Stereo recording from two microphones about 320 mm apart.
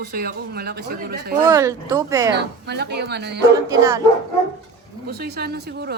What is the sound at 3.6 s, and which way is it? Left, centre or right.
Speech, centre.